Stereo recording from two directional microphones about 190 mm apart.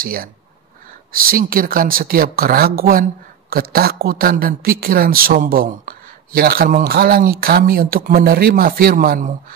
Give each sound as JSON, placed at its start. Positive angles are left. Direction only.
{"t": 0.0, "sound": "speech", "side_deg": -50}